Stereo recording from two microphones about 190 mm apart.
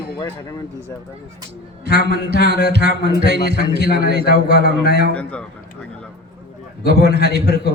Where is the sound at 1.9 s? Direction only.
55° left (ahead or behind).